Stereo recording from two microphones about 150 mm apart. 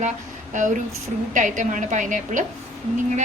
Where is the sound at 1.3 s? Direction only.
55° right (ahead or behind).